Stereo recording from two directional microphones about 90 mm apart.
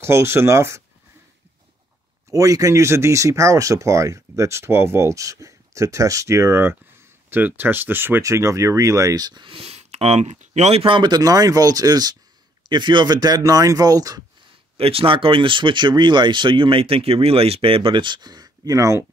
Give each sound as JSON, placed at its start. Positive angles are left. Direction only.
{"t": 0.0, "sound": "speech", "side_deg": -30}
{"t": 2.3, "sound": "speech", "side_deg": -40}
{"t": 8.2, "sound": "speech", "side_deg": -35}
{"t": 10.7, "sound": "speech", "side_deg": -90}
{"t": 11.0, "sound": "speech", "side_deg": -45}
{"t": 12.6, "sound": "speech", "side_deg": -60}
{"t": 14.8, "sound": "speech", "side_deg": -90}